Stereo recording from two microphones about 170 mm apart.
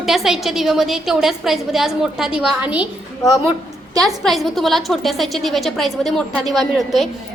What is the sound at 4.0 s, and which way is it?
A woman's voice, centre (ahead or behind).